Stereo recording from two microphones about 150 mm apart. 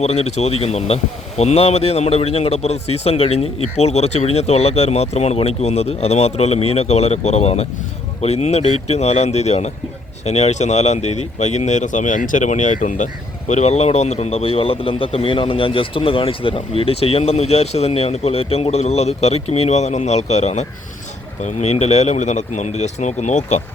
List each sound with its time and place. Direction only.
0.0 s speech: 45° left (ahead or behind)